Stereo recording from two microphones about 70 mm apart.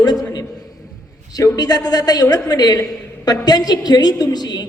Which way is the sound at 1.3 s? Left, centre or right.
Left.